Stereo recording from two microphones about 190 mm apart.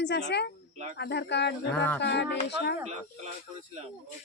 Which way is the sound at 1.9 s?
65° left (ahead or behind).